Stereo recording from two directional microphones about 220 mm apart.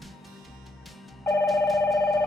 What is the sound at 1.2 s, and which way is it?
Telephone bell ringing, 10° left (ahead or behind).